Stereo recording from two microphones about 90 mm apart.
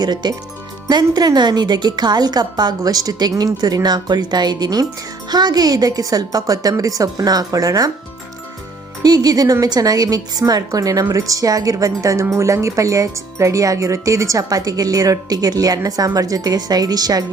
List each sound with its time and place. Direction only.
0.0 s a woman's voice: 50° right (ahead or behind)
9.0 s a woman's voice: 45° right (ahead or behind)